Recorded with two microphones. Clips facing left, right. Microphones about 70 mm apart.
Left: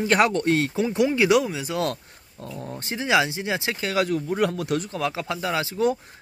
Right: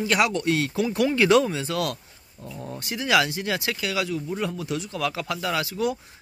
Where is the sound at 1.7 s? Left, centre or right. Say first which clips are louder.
Left 1 dB; left.